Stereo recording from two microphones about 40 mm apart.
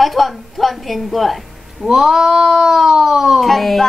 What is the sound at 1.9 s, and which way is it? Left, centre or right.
Speech, centre.